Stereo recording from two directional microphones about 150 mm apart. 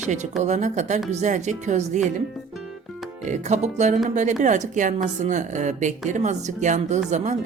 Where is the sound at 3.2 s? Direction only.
50° right (ahead or behind).